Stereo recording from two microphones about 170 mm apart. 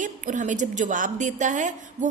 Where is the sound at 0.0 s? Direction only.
50° right (ahead or behind).